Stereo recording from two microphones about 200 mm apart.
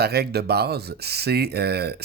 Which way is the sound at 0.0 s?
55° right (ahead or behind).